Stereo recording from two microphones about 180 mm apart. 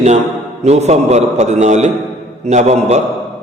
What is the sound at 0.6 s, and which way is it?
A man's voice, 35° right (ahead or behind).